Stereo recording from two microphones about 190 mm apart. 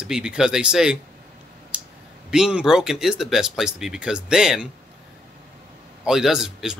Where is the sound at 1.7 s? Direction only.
5° right (ahead or behind).